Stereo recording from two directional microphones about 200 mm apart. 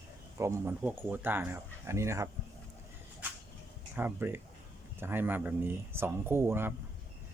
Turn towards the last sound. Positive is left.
turn(degrees=-10)  # may be behind; listen again after turning